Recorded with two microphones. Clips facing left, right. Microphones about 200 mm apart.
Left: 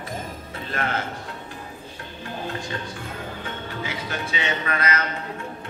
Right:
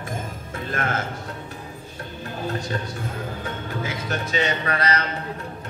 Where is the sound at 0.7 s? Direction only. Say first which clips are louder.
Right 1 dB; 45° right (ahead or behind).